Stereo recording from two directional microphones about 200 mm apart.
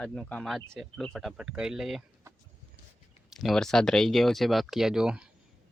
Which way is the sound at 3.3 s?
Centre (ahead or behind).